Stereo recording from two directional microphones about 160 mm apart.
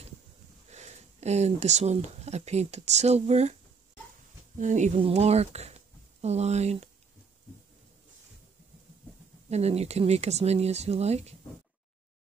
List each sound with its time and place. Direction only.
0.7 s speech: 45° right (ahead or behind)
4.6 s speech: 50° right (ahead or behind)
9.5 s speech: 40° right (ahead or behind)